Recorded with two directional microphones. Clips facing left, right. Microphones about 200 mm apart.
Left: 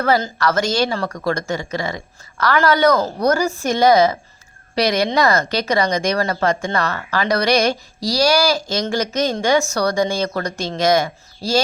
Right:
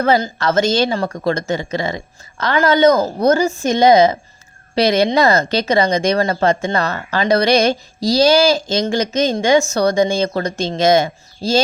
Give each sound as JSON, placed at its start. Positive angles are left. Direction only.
{"t": 0.0, "sound": "speech", "side_deg": -20}